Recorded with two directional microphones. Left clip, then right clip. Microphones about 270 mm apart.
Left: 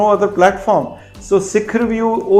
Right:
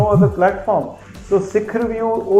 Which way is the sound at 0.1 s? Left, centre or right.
Left.